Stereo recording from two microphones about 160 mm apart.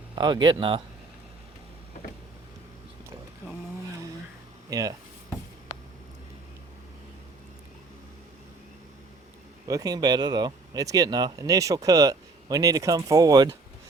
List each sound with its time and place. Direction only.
0.2 s speech: 25° right (ahead or behind)
4.7 s speech: 20° right (ahead or behind)
9.6 s speech: 25° right (ahead or behind)